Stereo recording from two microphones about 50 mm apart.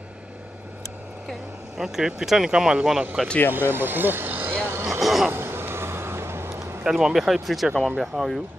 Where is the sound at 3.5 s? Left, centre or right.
Right.